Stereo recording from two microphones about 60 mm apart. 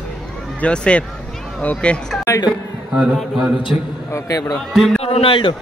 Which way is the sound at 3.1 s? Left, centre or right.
Centre.